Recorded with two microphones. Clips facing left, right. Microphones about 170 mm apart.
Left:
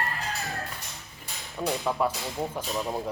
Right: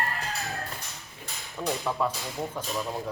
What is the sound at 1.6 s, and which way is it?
A man's voice, 10° left (ahead or behind).